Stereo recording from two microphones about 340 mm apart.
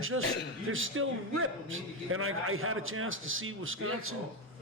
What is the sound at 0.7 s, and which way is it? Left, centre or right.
A man's voice, right.